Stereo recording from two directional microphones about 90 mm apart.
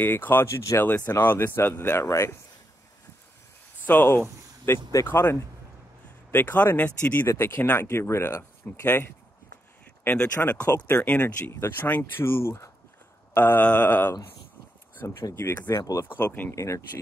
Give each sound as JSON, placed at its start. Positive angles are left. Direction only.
{"t": 0.0, "sound": "speech", "side_deg": 20}
{"t": 3.8, "sound": "speech", "side_deg": 20}
{"t": 10.0, "sound": "speech", "side_deg": 20}
{"t": 15.3, "sound": "speech", "side_deg": 30}
{"t": 15.8, "sound": "speech", "side_deg": 40}
{"t": 16.1, "sound": "speech", "side_deg": 25}
{"t": 16.5, "sound": "speech", "side_deg": 35}